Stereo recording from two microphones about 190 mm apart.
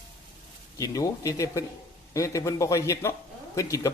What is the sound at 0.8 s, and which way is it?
Speech, 15° left (ahead or behind).